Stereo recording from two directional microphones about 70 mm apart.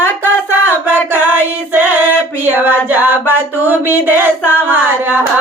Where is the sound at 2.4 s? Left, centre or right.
Right.